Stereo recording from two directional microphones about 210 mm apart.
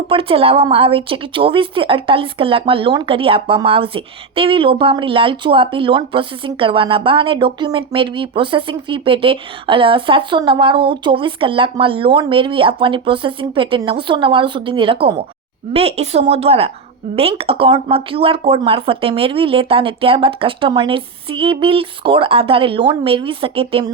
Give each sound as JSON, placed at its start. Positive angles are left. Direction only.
{"t": 0.1, "sound": "speech", "side_deg": -25}